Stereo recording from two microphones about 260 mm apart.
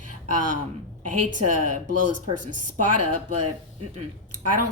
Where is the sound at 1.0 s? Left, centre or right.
Right.